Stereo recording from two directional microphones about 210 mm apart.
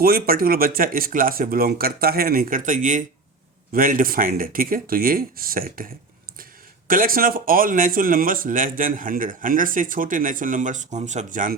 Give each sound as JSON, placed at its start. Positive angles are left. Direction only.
{"t": 0.0, "sound": "speech", "side_deg": -45}